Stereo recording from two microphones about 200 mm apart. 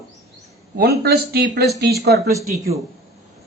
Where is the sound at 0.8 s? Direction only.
55° right (ahead or behind).